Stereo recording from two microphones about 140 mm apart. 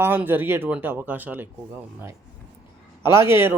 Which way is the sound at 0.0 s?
15° right (ahead or behind).